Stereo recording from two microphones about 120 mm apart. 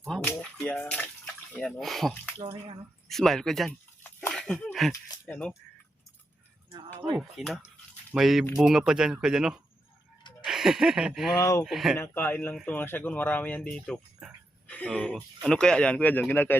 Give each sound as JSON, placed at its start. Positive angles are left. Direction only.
{"t": 0.1, "sound": "speech", "side_deg": 5}
{"t": 0.5, "sound": "water", "side_deg": 5}
{"t": 1.8, "sound": "speech", "side_deg": 0}
{"t": 2.4, "sound": "speech", "side_deg": -40}
{"t": 3.1, "sound": "speech", "side_deg": 0}
{"t": 3.7, "sound": "a sound", "side_deg": 20}
{"t": 4.3, "sound": "a sound", "side_deg": 5}
{"t": 5.3, "sound": "speech", "side_deg": 5}
{"t": 6.7, "sound": "a sound", "side_deg": -45}
{"t": 7.2, "sound": "speech", "side_deg": 0}
{"t": 11.3, "sound": "speech", "side_deg": 30}
{"t": 11.6, "sound": "speech", "side_deg": -5}
{"t": 11.9, "sound": "speech", "side_deg": 20}